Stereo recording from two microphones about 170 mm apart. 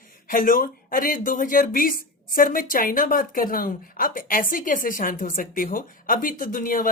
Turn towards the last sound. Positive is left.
turn(degrees=55)  # may be behind; listen again after turning